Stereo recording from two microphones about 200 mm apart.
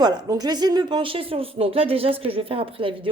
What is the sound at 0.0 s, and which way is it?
A woman's voice, 20° right (ahead or behind).